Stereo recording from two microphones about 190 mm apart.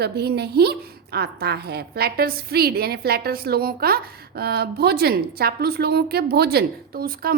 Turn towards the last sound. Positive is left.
turn(degrees=-50)  # may be behind; listen again after turning